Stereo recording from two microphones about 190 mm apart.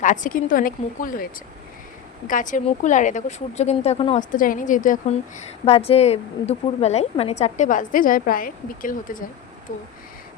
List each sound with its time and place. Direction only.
0.0 s a woman's voice: 40° left (ahead or behind)
5.6 s a woman's voice: 30° left (ahead or behind)